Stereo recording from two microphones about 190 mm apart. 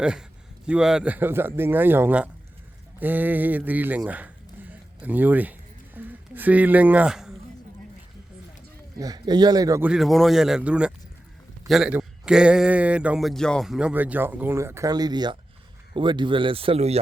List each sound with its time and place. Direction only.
0.0 s a man's voice: 5° right (ahead or behind)
9.0 s speech: 20° right (ahead or behind)
9.8 s a man's voice: 5° right (ahead or behind); by 17.0 s 35° right (ahead or behind)